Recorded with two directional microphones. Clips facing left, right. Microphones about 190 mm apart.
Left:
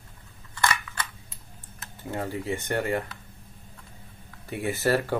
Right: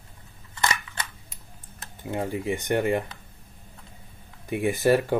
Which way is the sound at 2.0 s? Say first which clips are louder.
Right 2 dB; 15° right (ahead or behind).